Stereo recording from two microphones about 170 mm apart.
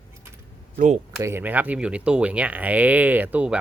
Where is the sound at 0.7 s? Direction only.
45° right (ahead or behind).